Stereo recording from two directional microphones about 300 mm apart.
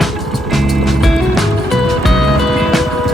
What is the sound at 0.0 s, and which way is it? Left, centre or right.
Music, centre.